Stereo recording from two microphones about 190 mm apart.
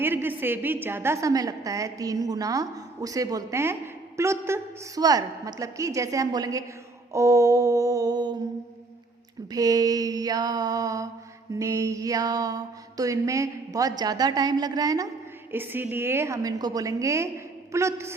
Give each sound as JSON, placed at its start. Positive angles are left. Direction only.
{"t": 0.0, "sound": "a woman's voice", "side_deg": -10}
{"t": 9.5, "sound": "a woman's voice", "side_deg": -20}